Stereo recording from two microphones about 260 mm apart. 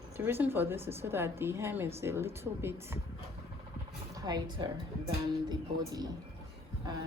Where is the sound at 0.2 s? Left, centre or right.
Centre.